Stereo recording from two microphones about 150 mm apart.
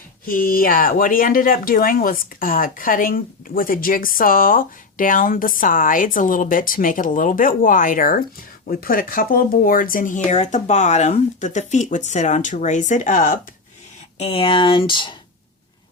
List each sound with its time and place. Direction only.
0.3 s speech: 70° left (ahead or behind)
14.2 s speech: 35° left (ahead or behind)